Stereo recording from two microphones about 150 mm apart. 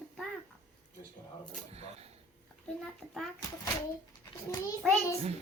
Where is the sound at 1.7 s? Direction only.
45° right (ahead or behind).